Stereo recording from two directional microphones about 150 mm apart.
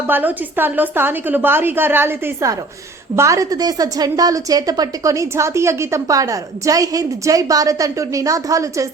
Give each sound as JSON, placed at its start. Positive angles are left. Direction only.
{"t": 0.1, "sound": "a woman's voice", "side_deg": -15}